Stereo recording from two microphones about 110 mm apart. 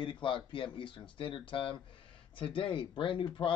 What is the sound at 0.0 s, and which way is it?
Speech, 50° left (ahead or behind).